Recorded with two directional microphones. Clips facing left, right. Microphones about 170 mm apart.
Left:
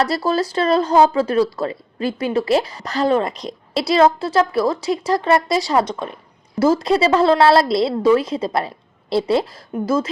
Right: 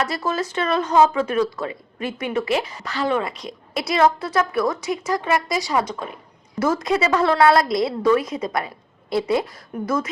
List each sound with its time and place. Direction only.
0.0 s speech: 35° left (ahead or behind)
6.6 s a woman's voice: 30° left (ahead or behind)